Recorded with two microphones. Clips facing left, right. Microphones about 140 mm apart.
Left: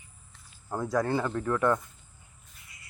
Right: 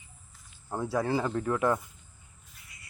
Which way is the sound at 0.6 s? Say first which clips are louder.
Left 1 dB; 5° right (ahead or behind).